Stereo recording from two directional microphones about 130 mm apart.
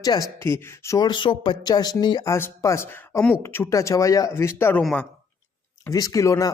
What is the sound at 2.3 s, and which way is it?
Speech, 20° left (ahead or behind).